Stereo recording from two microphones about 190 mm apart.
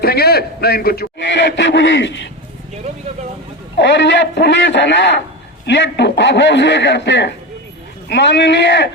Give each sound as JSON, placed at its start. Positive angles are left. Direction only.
{"t": 0.0, "sound": "a man's voice", "side_deg": 55}
{"t": 3.8, "sound": "a man's voice", "side_deg": 65}